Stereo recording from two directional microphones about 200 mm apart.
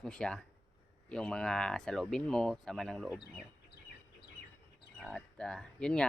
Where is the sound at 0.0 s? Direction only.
5° left (ahead or behind).